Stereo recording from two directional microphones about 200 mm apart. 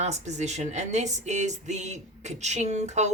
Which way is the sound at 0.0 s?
35° right (ahead or behind).